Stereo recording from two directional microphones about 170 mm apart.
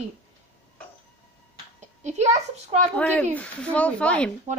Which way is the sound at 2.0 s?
40° right (ahead or behind).